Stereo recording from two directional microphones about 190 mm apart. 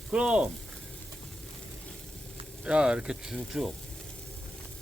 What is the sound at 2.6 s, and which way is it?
Speech, 5° right (ahead or behind).